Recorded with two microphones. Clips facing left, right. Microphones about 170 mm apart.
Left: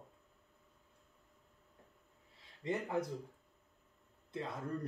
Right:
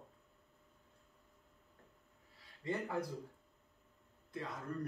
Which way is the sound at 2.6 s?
20° left (ahead or behind).